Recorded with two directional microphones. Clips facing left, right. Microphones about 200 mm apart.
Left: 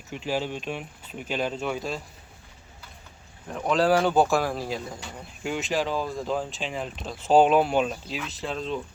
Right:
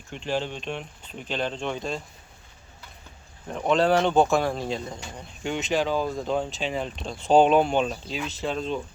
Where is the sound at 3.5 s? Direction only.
Centre (ahead or behind).